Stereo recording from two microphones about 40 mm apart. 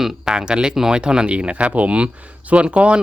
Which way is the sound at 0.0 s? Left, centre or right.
Centre.